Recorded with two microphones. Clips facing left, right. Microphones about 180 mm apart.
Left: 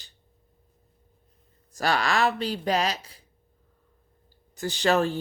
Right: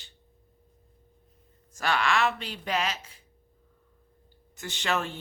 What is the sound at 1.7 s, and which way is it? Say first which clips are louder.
Speech: left 2 dB; 35° left (ahead or behind).